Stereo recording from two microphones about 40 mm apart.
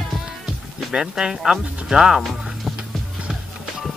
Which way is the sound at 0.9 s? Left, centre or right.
Centre.